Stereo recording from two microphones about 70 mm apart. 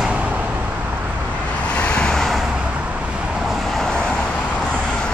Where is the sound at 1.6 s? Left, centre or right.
Centre.